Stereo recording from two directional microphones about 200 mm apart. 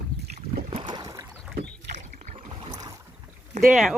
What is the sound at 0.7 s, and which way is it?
Boat, 20° right (ahead or behind).